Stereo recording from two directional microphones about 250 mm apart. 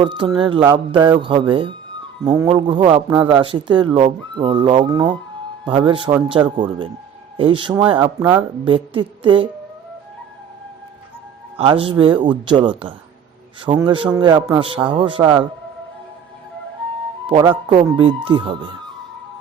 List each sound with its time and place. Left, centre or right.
0.0 s a man's voice: centre
11.5 s a man's voice: right
17.2 s a man's voice: centre